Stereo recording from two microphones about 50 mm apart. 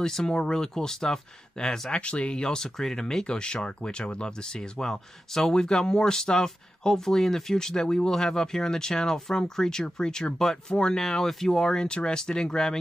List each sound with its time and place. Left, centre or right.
0.0 s speech: centre